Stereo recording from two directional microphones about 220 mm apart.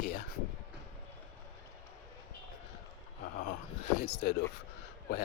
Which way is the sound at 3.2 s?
45° left (ahead or behind).